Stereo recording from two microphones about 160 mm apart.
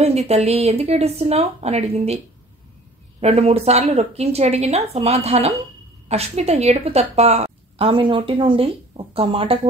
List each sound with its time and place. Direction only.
0.0 s a woman's voice: 40° right (ahead or behind)
3.2 s a woman's voice: 40° right (ahead or behind)